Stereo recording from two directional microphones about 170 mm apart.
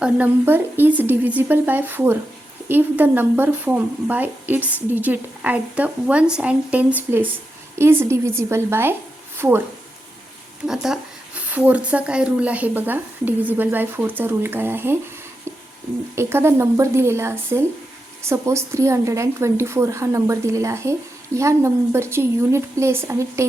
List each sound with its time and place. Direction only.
0.0 s speech: 10° right (ahead or behind)
10.7 s speech: 5° right (ahead or behind)
16.1 s speech: 15° right (ahead or behind)